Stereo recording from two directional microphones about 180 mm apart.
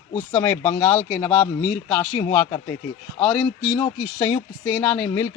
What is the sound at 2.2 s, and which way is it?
Speech, 15° left (ahead or behind).